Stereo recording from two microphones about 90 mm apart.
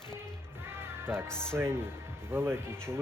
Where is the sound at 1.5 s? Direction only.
30° right (ahead or behind).